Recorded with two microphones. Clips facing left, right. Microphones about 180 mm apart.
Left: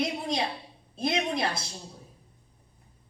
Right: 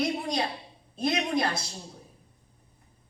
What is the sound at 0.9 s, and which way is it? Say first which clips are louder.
Speech: even; 25° left (ahead or behind).